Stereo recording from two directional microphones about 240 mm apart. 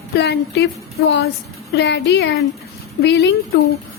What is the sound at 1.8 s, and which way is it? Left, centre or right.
A woman's voice, left.